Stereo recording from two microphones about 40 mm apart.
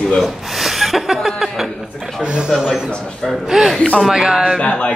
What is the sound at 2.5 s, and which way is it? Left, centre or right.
Speech, centre.